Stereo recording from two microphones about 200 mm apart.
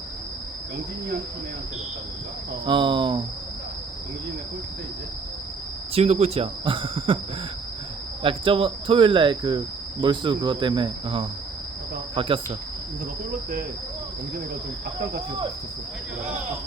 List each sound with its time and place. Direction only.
2.6 s cricket: 25° right (ahead or behind)
5.9 s cricket: 30° right (ahead or behind)
8.2 s cricket: 25° right (ahead or behind)